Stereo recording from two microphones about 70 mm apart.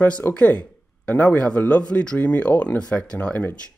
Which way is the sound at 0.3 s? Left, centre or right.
Centre.